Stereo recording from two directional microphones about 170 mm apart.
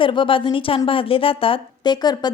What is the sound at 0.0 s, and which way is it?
A woman's voice, 30° left (ahead or behind).